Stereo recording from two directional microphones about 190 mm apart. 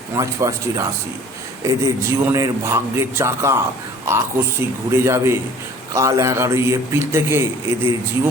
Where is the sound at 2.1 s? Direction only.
15° right (ahead or behind).